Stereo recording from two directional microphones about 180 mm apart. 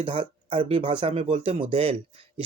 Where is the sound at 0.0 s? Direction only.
30° right (ahead or behind).